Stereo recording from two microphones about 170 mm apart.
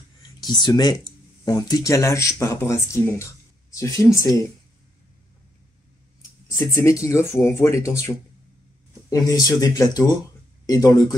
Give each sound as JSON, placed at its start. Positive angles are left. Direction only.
{"t": 0.4, "sound": "speech", "side_deg": 25}
{"t": 6.5, "sound": "speech", "side_deg": 15}